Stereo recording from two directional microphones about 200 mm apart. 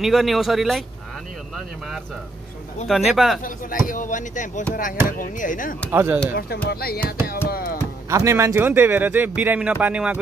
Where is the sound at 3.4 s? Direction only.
45° left (ahead or behind).